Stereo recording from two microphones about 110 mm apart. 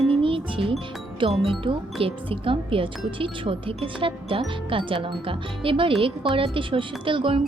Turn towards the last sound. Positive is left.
turn(degrees=-50)  # may be behind; listen again after turning